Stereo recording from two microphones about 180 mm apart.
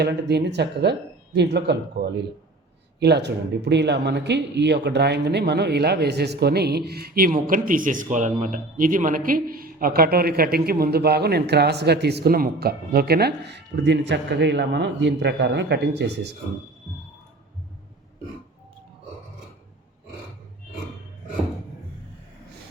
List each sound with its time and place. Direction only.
0.0 s speech: 65° right (ahead or behind)
3.0 s speech: 70° right (ahead or behind)